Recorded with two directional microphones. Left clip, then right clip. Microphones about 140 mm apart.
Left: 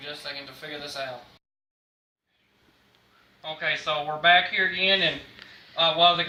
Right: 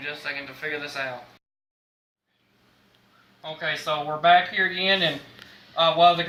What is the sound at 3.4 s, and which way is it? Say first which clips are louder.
Speech: left 1 dB; centre (ahead or behind).